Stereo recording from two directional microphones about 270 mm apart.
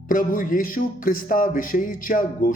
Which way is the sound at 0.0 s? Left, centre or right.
Left.